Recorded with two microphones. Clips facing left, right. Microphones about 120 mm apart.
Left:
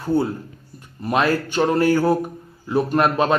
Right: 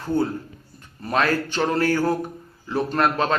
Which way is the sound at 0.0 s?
10° left (ahead or behind).